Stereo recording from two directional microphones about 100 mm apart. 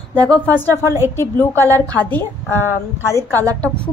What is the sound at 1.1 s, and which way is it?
Speech, 25° left (ahead or behind).